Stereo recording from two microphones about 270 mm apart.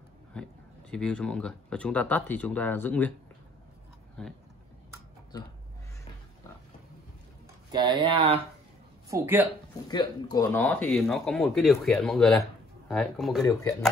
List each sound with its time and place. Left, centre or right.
0.3 s speech: centre
4.2 s speech: centre
5.3 s speech: centre
7.7 s speech: centre
9.1 s speech: centre
9.8 s speech: centre
13.5 s speech: centre